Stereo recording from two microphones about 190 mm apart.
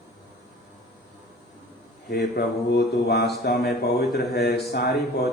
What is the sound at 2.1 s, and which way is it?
Speech, 60° left (ahead or behind).